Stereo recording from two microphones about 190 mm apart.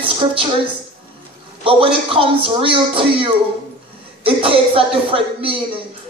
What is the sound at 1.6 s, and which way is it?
Music, 30° right (ahead or behind).